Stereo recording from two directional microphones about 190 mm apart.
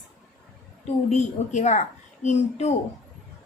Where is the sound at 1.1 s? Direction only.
35° left (ahead or behind).